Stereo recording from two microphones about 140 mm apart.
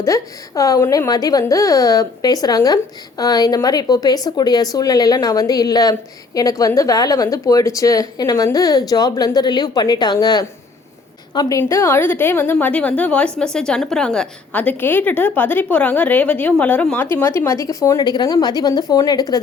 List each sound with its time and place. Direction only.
0.0 s a woman's voice: 20° left (ahead or behind)